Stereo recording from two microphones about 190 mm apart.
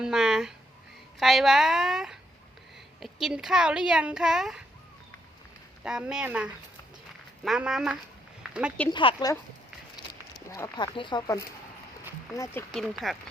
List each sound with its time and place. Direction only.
0.0 s speech: 5° right (ahead or behind)
5.8 s speech: 5° right (ahead or behind)
8.4 s a sound: 5° right (ahead or behind)
8.9 s speech: 25° left (ahead or behind)
10.5 s speech: 20° left (ahead or behind)
12.7 s speech: centre (ahead or behind)